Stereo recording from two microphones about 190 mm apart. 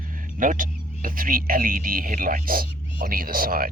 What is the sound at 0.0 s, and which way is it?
Speech, 45° right (ahead or behind).